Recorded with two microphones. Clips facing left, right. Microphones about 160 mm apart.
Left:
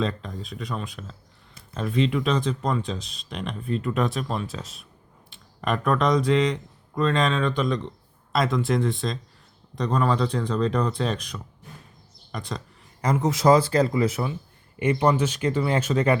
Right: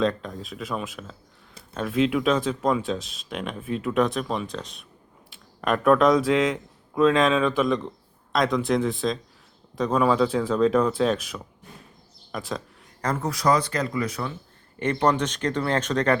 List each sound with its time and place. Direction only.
0.0 s speech: centre (ahead or behind)
13.0 s speech: 10° left (ahead or behind)
13.3 s speech: 25° left (ahead or behind)
14.8 s speech: 10° left (ahead or behind)